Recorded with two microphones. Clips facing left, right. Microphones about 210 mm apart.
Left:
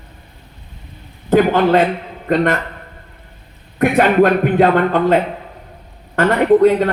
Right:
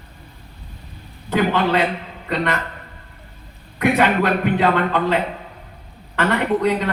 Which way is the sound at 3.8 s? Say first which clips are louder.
Left 5 dB; 50° left (ahead or behind).